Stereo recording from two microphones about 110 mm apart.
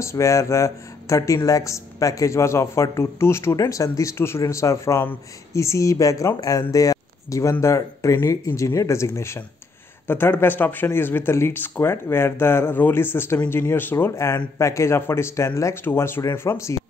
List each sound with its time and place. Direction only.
0.0 s speech: 25° left (ahead or behind)